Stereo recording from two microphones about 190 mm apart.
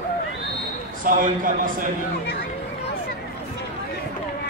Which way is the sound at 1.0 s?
45° right (ahead or behind).